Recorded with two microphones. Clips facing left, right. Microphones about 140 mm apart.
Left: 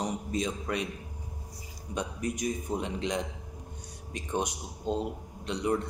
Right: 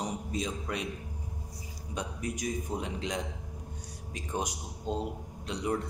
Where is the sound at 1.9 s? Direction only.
Centre (ahead or behind).